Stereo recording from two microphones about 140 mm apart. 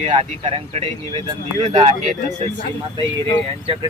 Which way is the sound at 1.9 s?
60° right (ahead or behind).